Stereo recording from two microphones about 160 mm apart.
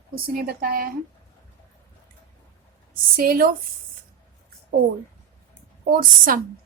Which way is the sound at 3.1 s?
70° right (ahead or behind).